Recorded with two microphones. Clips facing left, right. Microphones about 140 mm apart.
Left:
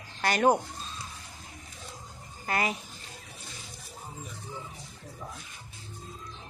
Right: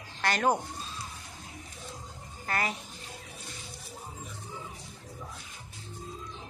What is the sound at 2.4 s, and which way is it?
Speech, 15° left (ahead or behind).